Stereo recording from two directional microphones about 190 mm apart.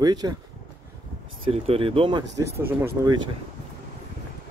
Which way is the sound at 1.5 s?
30° right (ahead or behind).